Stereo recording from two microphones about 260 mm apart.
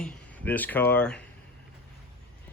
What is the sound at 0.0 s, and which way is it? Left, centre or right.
Speech, centre.